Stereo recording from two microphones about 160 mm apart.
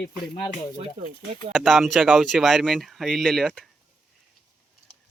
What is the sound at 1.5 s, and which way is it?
Speech, centre (ahead or behind).